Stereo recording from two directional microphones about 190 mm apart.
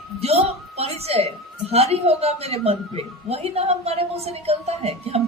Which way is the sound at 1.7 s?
35° right (ahead or behind).